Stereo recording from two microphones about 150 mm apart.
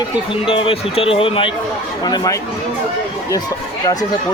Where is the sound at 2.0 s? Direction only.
25° left (ahead or behind).